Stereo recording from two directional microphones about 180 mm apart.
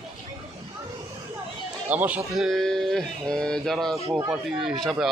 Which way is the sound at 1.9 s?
10° right (ahead or behind).